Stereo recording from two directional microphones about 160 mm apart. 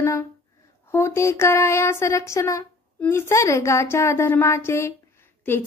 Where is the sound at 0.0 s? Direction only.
15° left (ahead or behind).